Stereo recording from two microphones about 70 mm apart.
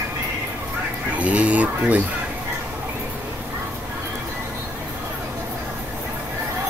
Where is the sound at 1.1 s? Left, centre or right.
Right.